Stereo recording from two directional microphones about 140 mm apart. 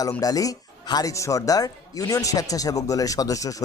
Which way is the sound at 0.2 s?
25° left (ahead or behind).